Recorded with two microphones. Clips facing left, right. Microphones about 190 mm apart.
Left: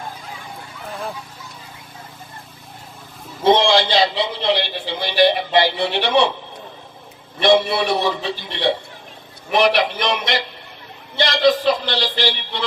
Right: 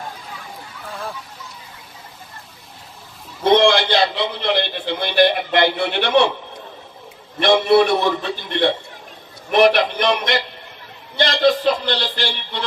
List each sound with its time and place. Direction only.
3.4 s a man's voice: 55° right (ahead or behind)
7.3 s a man's voice: 55° right (ahead or behind)